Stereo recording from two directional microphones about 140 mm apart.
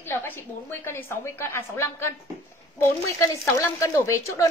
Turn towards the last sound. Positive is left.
turn(degrees=20)  # may be behind; listen again after turning